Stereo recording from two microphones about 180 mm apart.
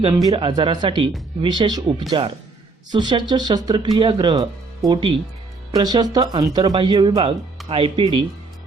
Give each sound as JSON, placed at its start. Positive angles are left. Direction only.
{"t": 0.0, "sound": "speech", "side_deg": -20}